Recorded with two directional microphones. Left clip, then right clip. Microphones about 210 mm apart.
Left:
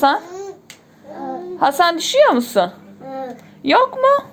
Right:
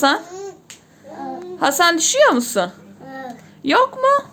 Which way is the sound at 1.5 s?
5° right (ahead or behind).